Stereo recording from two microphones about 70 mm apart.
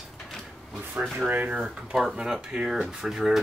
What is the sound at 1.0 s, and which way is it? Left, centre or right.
Speech, centre.